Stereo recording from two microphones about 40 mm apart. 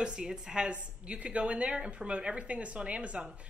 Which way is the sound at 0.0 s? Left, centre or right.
Right.